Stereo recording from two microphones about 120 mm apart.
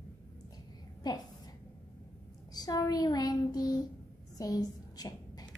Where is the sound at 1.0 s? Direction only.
35° left (ahead or behind).